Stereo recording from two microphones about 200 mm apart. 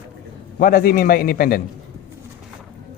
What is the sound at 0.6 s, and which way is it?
A man's voice, 45° left (ahead or behind).